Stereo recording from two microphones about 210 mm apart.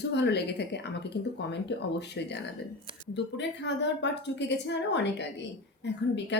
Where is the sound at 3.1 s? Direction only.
55° left (ahead or behind).